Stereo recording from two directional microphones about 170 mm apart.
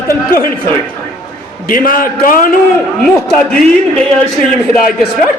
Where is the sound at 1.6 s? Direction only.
55° left (ahead or behind).